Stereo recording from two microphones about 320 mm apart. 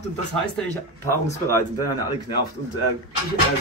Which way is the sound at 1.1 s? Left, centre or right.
Centre.